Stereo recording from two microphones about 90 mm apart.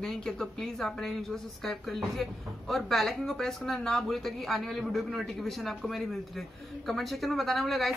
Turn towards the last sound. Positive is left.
turn(degrees=0)  # may be behind; listen again after turning